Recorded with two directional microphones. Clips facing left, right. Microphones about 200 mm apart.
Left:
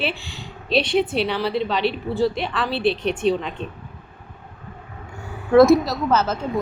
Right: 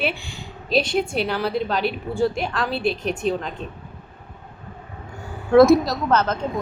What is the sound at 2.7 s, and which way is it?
Speech, 45° right (ahead or behind).